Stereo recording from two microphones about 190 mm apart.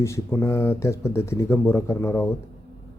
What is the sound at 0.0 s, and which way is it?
Speech, 15° left (ahead or behind).